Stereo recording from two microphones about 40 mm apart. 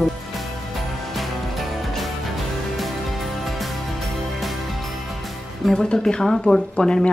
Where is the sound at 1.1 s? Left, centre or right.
Centre.